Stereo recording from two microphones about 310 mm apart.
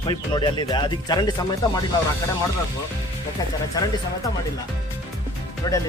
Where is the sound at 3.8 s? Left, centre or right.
Centre.